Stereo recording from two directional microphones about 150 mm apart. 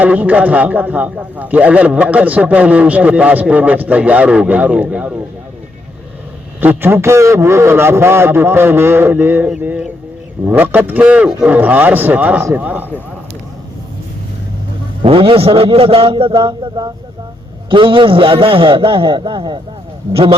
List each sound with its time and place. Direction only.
0.0 s a man's voice: 10° right (ahead or behind)
6.6 s a man's voice: 15° right (ahead or behind)
15.0 s a man's voice: 35° right (ahead or behind)